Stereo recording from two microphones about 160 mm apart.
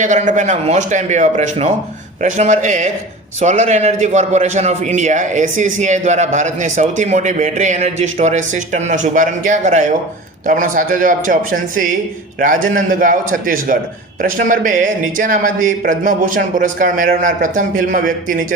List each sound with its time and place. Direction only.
0.0 s a man's voice: 50° right (ahead or behind)